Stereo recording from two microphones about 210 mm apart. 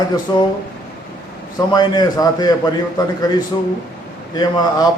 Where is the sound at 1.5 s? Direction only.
20° left (ahead or behind).